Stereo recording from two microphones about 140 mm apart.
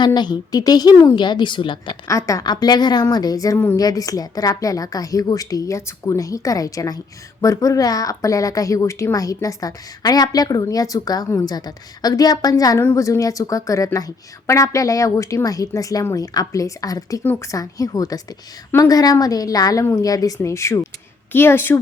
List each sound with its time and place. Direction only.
0.0 s a woman's voice: 30° left (ahead or behind)
2.0 s a woman's voice: 25° left (ahead or behind)